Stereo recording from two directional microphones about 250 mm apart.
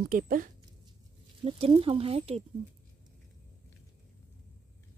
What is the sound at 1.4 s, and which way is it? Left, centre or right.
Speech, right.